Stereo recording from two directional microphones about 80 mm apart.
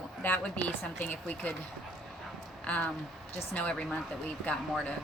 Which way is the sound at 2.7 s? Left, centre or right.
Centre.